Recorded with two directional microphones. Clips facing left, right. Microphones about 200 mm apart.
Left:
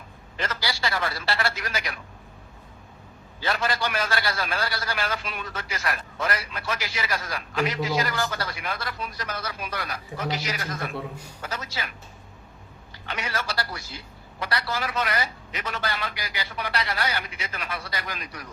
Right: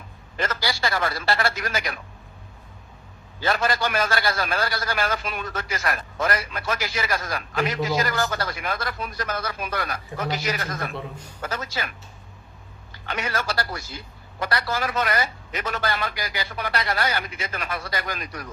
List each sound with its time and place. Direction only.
0.3 s a man's voice: 50° right (ahead or behind)
3.4 s a man's voice: 45° right (ahead or behind)
13.1 s a man's voice: 50° right (ahead or behind)